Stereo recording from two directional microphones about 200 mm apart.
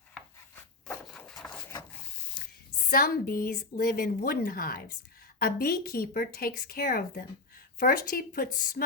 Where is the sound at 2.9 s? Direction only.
50° left (ahead or behind).